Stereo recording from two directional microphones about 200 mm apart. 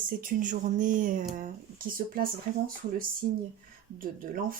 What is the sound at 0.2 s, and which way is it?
Speech, 40° right (ahead or behind).